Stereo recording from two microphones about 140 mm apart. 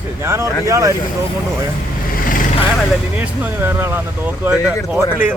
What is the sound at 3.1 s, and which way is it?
Speech, 10° right (ahead or behind).